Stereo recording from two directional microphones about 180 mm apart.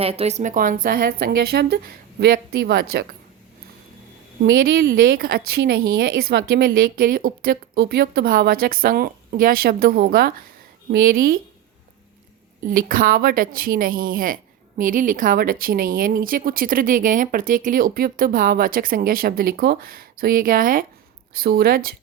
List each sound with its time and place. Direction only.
0.0 s speech: 35° right (ahead or behind); by 3.2 s 60° right (ahead or behind)
4.5 s speech: 55° right (ahead or behind)
12.6 s speech: 50° right (ahead or behind)